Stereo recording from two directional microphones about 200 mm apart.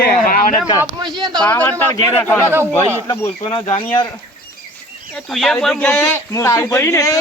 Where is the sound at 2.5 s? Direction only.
10° right (ahead or behind).